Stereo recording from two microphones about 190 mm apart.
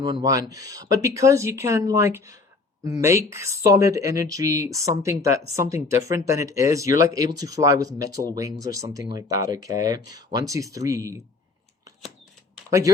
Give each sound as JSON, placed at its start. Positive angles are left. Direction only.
{"t": 0.0, "sound": "speech", "side_deg": -20}